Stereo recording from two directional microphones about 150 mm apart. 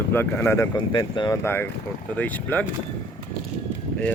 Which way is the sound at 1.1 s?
30° left (ahead or behind).